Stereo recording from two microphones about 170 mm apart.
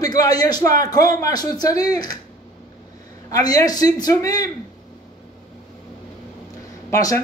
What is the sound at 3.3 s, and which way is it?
A man's voice, 20° left (ahead or behind).